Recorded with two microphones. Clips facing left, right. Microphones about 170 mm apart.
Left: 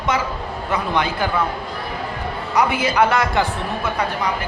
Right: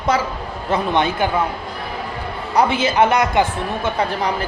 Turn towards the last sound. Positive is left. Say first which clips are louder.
# right 2 dB
turn(degrees=-25)  # may be behind; listen again after turning